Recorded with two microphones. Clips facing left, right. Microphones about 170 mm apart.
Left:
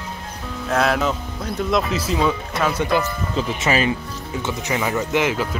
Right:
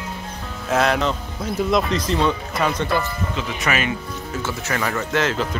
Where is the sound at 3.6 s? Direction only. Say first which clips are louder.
Left 3 dB; 30° left (ahead or behind).